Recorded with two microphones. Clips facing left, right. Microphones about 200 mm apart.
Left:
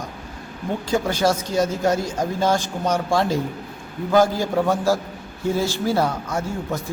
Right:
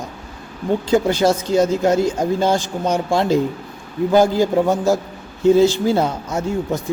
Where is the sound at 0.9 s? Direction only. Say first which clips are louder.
Right 4 dB; 20° right (ahead or behind).